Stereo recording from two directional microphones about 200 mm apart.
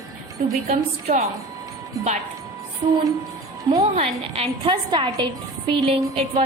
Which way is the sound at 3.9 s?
30° right (ahead or behind).